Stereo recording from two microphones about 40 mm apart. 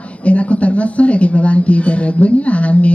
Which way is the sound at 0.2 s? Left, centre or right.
Left.